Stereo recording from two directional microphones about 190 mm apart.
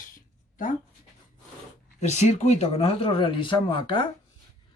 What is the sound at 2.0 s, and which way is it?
Speech, 35° left (ahead or behind).